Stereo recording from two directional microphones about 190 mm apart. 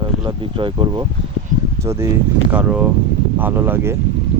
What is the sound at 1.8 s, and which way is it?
Speech, 15° right (ahead or behind).